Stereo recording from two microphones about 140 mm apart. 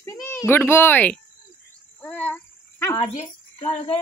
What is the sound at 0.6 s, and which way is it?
Cricket, 15° left (ahead or behind).